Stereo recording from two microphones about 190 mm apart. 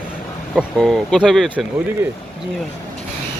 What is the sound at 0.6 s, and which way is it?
Speech, centre (ahead or behind).